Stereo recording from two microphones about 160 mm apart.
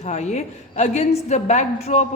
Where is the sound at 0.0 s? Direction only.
50° left (ahead or behind).